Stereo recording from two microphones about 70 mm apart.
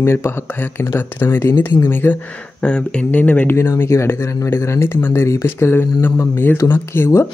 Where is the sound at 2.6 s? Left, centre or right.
Centre.